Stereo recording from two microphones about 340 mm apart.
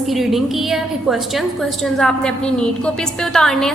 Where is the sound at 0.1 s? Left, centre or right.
Centre.